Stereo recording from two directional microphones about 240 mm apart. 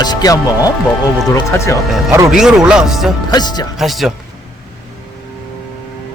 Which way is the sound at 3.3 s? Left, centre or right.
Centre.